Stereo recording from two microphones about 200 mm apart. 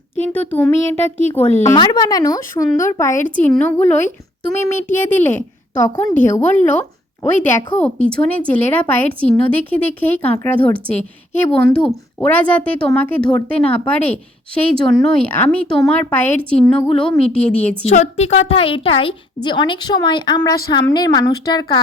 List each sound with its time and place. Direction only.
0.3 s a woman's voice: 10° left (ahead or behind)
17.8 s a woman's voice: 35° left (ahead or behind)